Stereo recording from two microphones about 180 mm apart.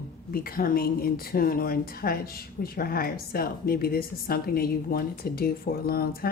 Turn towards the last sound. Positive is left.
turn(degrees=55)  # may be behind; listen again after turning